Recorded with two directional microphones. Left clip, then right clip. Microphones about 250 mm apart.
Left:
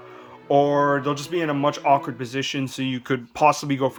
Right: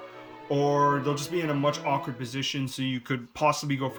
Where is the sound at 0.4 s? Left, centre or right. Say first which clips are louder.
Left 5 dB; centre.